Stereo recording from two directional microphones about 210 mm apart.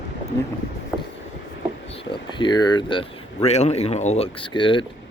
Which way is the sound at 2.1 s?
20° left (ahead or behind).